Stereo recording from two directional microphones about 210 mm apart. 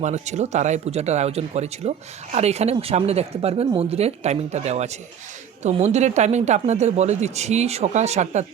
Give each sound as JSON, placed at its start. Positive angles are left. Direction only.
{"t": 0.0, "sound": "speech", "side_deg": -35}